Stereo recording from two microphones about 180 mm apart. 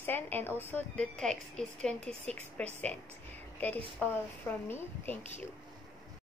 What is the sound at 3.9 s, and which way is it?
A woman's voice, 10° left (ahead or behind).